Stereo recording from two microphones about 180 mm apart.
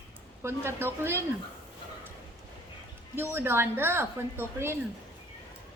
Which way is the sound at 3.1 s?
10° right (ahead or behind).